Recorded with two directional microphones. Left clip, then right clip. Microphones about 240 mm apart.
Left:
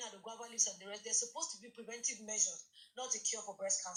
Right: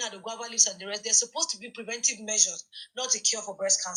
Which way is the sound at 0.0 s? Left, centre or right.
Right.